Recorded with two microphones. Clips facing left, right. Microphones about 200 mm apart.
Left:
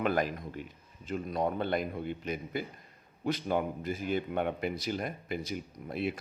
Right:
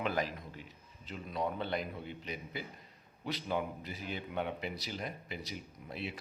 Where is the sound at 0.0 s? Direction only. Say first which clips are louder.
Left 5 dB; 55° left (ahead or behind).